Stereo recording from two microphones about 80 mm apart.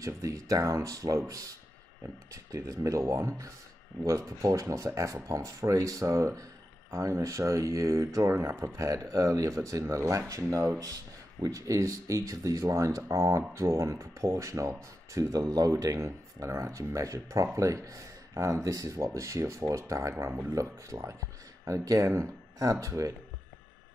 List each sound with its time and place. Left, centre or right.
0.0 s speech: right